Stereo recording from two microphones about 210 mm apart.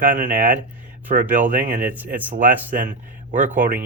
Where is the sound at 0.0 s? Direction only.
40° right (ahead or behind).